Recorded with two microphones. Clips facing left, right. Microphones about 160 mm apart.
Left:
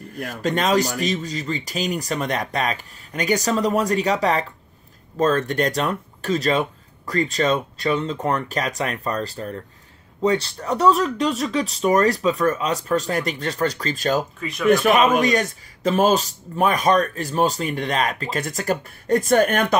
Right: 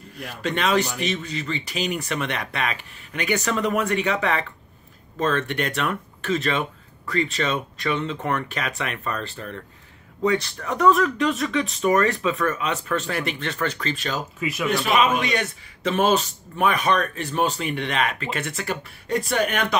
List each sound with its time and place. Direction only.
0.1 s a man's voice: 45° left (ahead or behind)
14.4 s speech: 5° right (ahead or behind)
14.7 s a man's voice: 45° left (ahead or behind)